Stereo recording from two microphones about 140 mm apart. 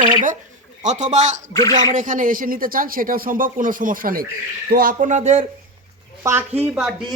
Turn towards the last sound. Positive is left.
turn(degrees=-5)  # may be behind; listen again after turning